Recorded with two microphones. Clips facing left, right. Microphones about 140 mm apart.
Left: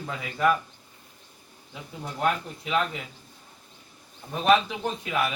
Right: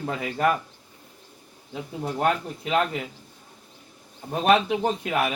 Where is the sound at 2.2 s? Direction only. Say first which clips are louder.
Right 2 dB; 60° right (ahead or behind).